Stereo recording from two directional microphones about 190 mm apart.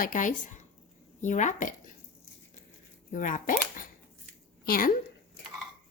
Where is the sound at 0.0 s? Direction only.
45° left (ahead or behind).